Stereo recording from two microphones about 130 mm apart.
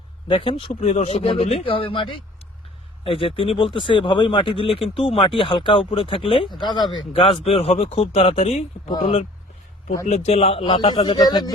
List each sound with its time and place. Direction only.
0.3 s speech: 40° left (ahead or behind)
0.9 s speech: 55° left (ahead or behind); by 7.0 s 35° left (ahead or behind)
7.1 s a man's voice: 45° left (ahead or behind)